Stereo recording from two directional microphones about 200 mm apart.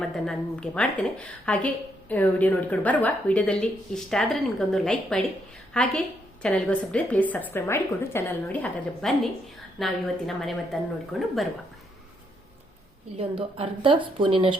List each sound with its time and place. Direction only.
0.3 s a woman's voice: 5° left (ahead or behind)
13.1 s a woman's voice: 25° right (ahead or behind)